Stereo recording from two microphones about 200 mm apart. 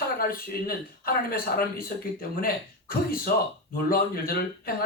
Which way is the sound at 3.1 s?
45° left (ahead or behind).